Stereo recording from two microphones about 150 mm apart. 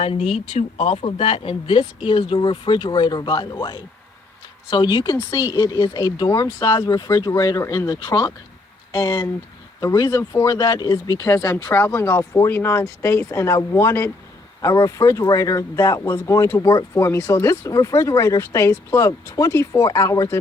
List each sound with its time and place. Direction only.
0.0 s speech: 40° left (ahead or behind); by 20.4 s 20° left (ahead or behind)